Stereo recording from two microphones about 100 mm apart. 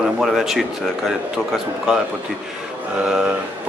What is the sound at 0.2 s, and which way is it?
Speech, centre (ahead or behind).